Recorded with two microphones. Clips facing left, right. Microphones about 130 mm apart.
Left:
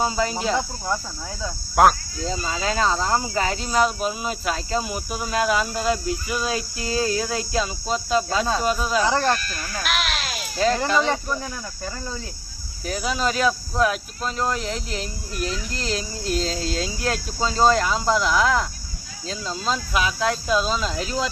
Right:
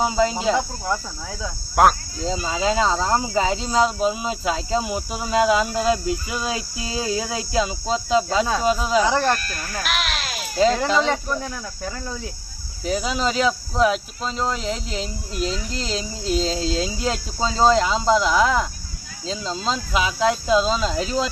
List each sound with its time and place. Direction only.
0.0 s speech: 15° right (ahead or behind)
1.4 s speech: centre (ahead or behind)
2.2 s speech: 15° right (ahead or behind)
9.0 s speech: centre (ahead or behind)
10.9 s speech: 10° left (ahead or behind)
11.3 s speech: centre (ahead or behind)
12.8 s speech: 20° right (ahead or behind)